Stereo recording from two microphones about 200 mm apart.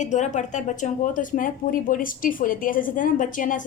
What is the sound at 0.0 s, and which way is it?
Speech, 35° left (ahead or behind).